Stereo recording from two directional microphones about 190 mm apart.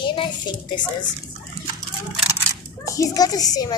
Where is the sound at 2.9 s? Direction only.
20° left (ahead or behind).